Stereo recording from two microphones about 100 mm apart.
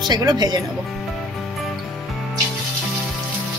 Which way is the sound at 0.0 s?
45° right (ahead or behind).